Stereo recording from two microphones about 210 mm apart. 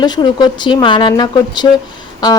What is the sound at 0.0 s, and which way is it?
A woman's voice, 20° left (ahead or behind).